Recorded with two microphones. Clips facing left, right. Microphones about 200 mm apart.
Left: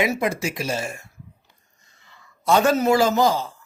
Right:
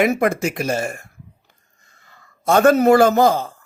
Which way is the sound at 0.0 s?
55° right (ahead or behind).